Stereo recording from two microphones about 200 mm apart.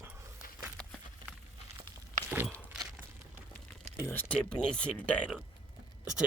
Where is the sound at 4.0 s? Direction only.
10° left (ahead or behind).